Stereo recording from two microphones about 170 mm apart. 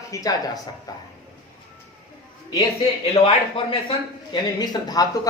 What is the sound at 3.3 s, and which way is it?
A man's voice, 35° left (ahead or behind).